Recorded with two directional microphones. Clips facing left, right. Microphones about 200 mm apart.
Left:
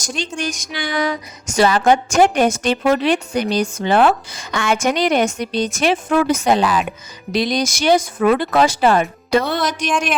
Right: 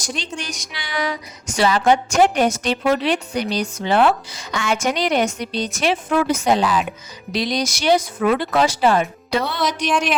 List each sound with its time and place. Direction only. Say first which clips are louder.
0.3 s speech: left 7 dB; 45° left (ahead or behind)
9.8 s speech: even; centre (ahead or behind)